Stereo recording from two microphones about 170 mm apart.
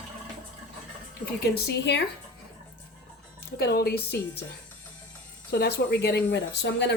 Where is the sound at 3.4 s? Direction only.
65° left (ahead or behind).